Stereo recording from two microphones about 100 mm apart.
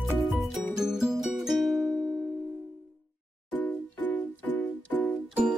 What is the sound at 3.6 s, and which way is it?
Music, 15° left (ahead or behind).